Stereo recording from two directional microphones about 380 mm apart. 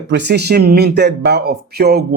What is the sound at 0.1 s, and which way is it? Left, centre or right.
Speech, right.